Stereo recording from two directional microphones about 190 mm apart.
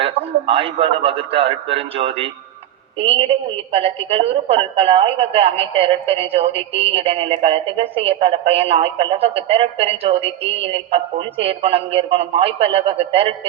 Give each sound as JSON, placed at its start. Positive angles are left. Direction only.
{"t": 0.0, "sound": "a woman's voice", "side_deg": -30}